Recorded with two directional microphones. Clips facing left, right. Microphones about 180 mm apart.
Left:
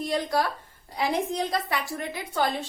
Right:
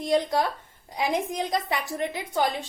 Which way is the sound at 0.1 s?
20° right (ahead or behind).